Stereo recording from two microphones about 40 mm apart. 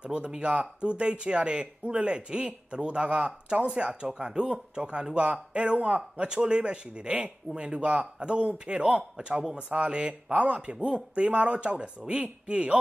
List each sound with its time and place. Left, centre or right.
0.0 s speech: right